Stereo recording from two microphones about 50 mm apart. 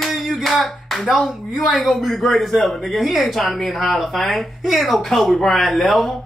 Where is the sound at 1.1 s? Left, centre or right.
Centre.